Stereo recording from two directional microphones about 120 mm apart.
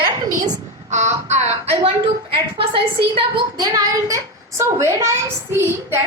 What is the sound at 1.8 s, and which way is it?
A woman's voice, 45° right (ahead or behind).